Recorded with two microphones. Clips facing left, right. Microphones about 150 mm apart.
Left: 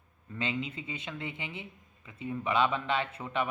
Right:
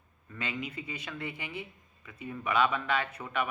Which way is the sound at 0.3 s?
25° left (ahead or behind).